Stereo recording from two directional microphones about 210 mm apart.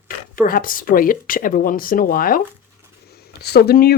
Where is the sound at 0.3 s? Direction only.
40° left (ahead or behind).